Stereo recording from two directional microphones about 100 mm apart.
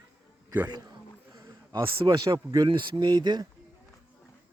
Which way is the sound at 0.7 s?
40° right (ahead or behind).